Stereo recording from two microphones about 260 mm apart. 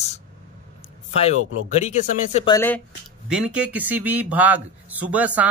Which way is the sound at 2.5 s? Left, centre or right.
Centre.